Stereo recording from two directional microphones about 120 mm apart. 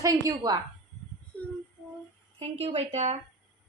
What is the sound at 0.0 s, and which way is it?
Speech, 30° right (ahead or behind).